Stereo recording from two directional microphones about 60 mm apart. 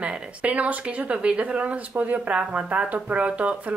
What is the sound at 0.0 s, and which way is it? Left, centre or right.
Speech, centre.